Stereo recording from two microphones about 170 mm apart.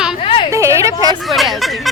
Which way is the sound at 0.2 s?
35° left (ahead or behind).